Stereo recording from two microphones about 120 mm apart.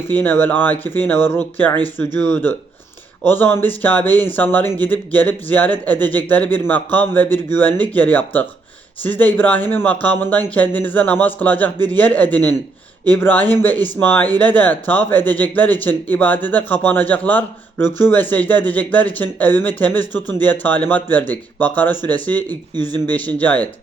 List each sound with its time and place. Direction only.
0.1 s speech: 15° left (ahead or behind)